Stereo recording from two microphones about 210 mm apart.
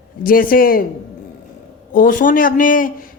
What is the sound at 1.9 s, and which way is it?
A woman's voice, 40° left (ahead or behind).